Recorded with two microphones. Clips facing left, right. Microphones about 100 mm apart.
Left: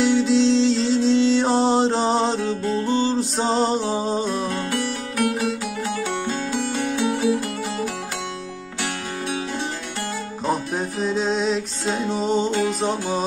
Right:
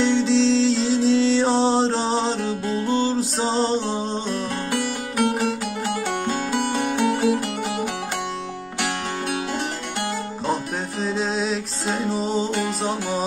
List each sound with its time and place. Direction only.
0.0 s music: 5° left (ahead or behind)
5.9 s music: 65° right (ahead or behind)
10.4 s music: centre (ahead or behind)
12.4 s music: 60° right (ahead or behind)